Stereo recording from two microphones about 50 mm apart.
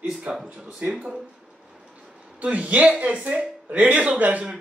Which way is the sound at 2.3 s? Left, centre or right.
Right.